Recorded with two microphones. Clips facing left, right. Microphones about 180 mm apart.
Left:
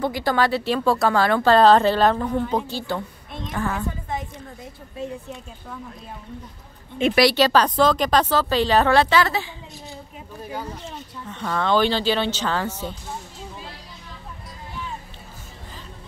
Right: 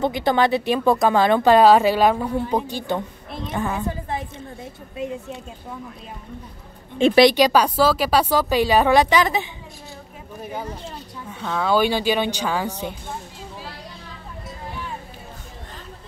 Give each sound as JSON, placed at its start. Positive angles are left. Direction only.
{"t": 0.0, "sound": "a woman's voice", "side_deg": -20}
{"t": 7.0, "sound": "a woman's voice", "side_deg": -30}
{"t": 7.2, "sound": "a woman's voice", "side_deg": -15}
{"t": 11.2, "sound": "a woman's voice", "side_deg": -5}